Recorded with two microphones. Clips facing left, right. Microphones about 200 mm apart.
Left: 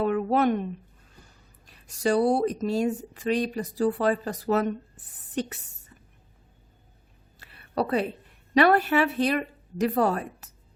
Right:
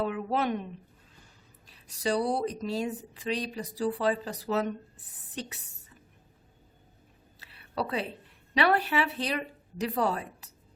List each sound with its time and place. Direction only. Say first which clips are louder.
0.0 s a woman's voice: left 6 dB; 55° left (ahead or behind)
7.3 s a sound: left 5 dB; 50° left (ahead or behind)
8.5 s a woman's voice: left 6 dB; 50° left (ahead or behind)